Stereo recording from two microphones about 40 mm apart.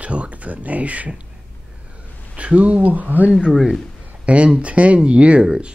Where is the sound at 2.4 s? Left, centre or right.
Right.